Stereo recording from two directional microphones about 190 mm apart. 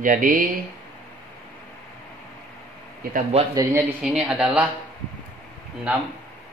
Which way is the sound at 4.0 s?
5° right (ahead or behind).